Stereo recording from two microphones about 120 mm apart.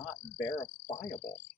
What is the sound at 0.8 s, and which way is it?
Frog, 45° left (ahead or behind).